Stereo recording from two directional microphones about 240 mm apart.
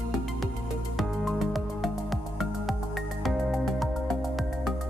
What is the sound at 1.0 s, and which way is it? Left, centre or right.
Music, centre.